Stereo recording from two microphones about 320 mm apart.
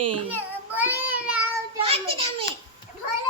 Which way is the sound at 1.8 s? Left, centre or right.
Centre.